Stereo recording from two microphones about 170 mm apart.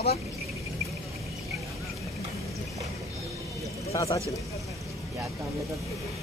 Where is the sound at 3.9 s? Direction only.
20° left (ahead or behind).